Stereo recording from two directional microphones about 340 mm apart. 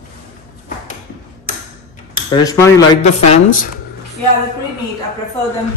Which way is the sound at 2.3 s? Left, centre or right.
Centre.